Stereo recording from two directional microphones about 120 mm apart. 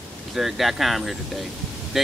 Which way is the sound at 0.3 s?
Centre (ahead or behind).